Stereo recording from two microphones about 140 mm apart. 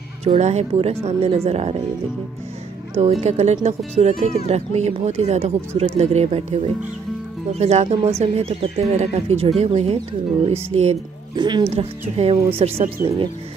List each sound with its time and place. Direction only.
0.2 s speech: 50° right (ahead or behind)
3.0 s speech: 50° right (ahead or behind)
11.3 s speech: 30° right (ahead or behind)
11.7 s speech: 45° right (ahead or behind)